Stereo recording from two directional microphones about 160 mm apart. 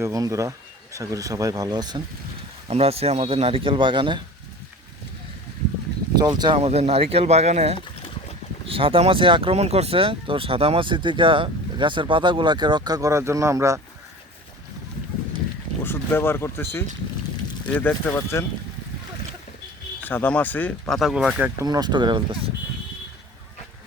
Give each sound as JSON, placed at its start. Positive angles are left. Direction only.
{"t": 0.0, "sound": "speech", "side_deg": -20}
{"t": 2.6, "sound": "speech", "side_deg": -40}
{"t": 6.1, "sound": "speech", "side_deg": -25}
{"t": 6.6, "sound": "speech", "side_deg": -40}
{"t": 7.8, "sound": "a sound", "side_deg": 30}
{"t": 8.6, "sound": "speech", "side_deg": -35}
{"t": 15.8, "sound": "speech", "side_deg": 15}
{"t": 20.1, "sound": "speech", "side_deg": 10}
{"t": 21.0, "sound": "speech", "side_deg": 0}
{"t": 21.6, "sound": "speech", "side_deg": -25}